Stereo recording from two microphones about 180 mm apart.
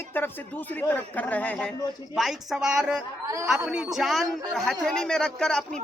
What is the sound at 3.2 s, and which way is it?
Speech, 15° right (ahead or behind).